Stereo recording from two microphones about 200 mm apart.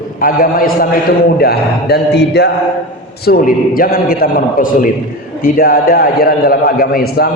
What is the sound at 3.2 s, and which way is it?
A man's voice, 45° left (ahead or behind).